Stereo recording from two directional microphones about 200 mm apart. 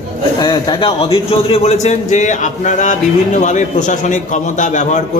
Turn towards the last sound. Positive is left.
turn(degrees=40)  # may be behind; listen again after turning